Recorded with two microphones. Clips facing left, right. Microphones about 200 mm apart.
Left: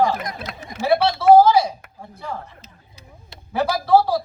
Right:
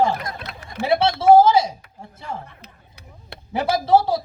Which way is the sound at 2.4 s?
60° right (ahead or behind).